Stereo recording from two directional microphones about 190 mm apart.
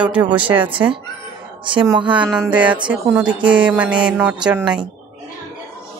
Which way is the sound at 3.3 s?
25° right (ahead or behind).